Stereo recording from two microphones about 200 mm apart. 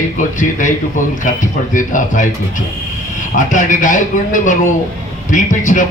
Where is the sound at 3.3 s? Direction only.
40° left (ahead or behind).